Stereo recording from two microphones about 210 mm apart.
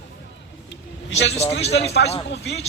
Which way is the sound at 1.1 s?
60° left (ahead or behind).